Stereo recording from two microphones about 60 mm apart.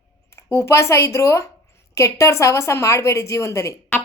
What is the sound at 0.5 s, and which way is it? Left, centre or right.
A woman's voice, left.